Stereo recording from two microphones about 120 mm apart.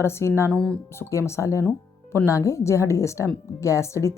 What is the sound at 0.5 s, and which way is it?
Speech, 10° left (ahead or behind).